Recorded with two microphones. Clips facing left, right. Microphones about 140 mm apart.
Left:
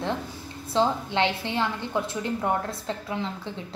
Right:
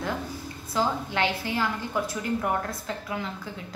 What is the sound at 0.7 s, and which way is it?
Speech, 25° left (ahead or behind).